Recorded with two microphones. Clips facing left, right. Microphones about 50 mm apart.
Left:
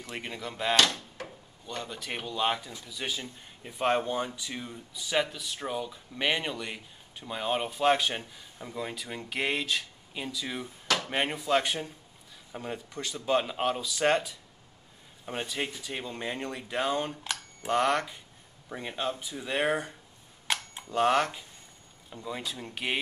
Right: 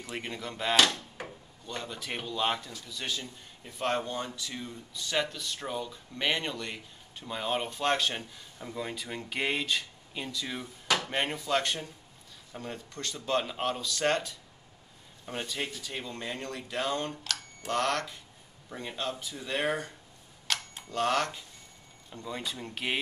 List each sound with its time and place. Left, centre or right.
0.1 s speech: centre
1.2 s drawer open or close: centre
1.7 s a man's voice: centre
20.4 s a sound: centre
22.1 s speech: centre